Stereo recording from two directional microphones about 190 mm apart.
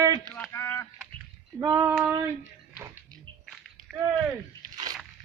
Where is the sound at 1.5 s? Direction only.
20° right (ahead or behind).